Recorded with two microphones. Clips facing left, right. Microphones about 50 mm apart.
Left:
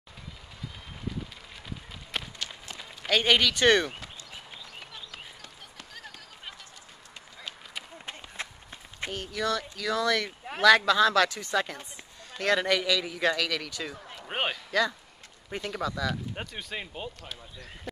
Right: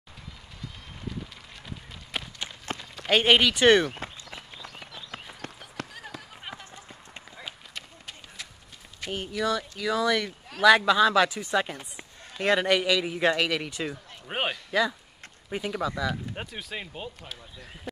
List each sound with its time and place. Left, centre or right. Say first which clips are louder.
2.1 s run: even; centre
2.7 s a sound: right 7 dB; right
3.1 s speech: right 3 dB; centre
4.0 s walk: right 6 dB; right
5.9 s a sound: right 4 dB; centre
8.4 s walk: left 6 dB; left
9.1 s speech: right 2 dB; centre
14.2 s a sound: right 1 dB; centre
14.7 s speech: right 2 dB; centre